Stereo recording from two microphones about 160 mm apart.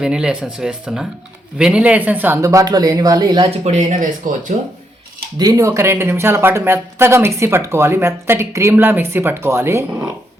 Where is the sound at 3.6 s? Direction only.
45° right (ahead or behind).